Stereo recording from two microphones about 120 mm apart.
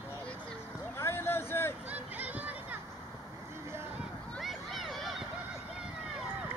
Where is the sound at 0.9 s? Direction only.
20° left (ahead or behind).